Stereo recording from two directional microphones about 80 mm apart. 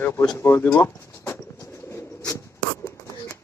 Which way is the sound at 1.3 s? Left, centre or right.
Left.